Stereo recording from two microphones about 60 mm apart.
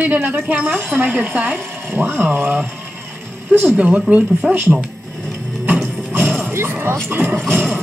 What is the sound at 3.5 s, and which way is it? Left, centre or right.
Speech, right.